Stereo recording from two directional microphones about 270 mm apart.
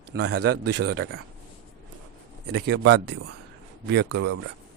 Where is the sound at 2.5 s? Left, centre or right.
Right.